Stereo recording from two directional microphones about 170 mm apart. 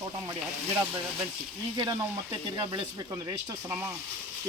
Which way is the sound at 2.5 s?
25° right (ahead or behind).